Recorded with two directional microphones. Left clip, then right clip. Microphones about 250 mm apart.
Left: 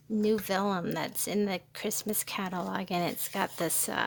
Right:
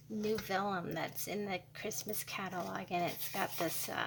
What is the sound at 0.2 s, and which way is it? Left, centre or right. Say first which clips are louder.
A woman's voice: left 7 dB; left.